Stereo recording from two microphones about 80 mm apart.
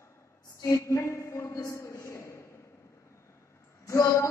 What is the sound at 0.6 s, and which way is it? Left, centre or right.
Speech, left.